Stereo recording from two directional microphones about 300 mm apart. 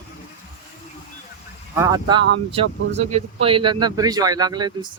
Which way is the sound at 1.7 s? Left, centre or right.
Centre.